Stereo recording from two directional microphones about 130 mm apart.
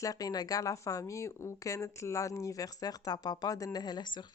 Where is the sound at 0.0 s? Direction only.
30° left (ahead or behind).